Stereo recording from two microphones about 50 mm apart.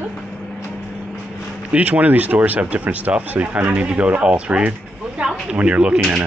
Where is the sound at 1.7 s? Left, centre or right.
Right.